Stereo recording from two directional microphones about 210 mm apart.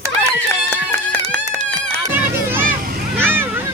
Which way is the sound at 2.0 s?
10° right (ahead or behind).